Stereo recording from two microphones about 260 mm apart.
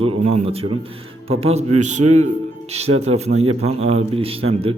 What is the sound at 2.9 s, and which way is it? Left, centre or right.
A man's voice, right.